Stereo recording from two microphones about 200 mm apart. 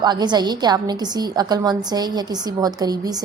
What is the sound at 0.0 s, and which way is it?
A woman's voice, 20° right (ahead or behind).